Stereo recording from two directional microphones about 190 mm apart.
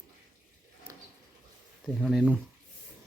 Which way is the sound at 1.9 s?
Centre (ahead or behind).